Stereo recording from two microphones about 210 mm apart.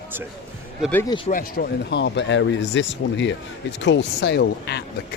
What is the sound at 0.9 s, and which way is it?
Speech, 10° left (ahead or behind).